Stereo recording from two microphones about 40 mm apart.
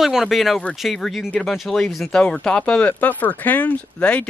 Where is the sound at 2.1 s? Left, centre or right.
Centre.